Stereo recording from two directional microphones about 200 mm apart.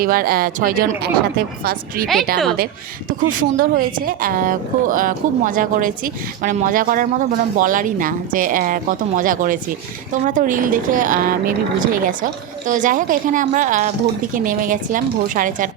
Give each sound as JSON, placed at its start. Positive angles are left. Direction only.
{"t": 0.0, "sound": "speech", "side_deg": -45}
{"t": 3.1, "sound": "speech", "side_deg": -40}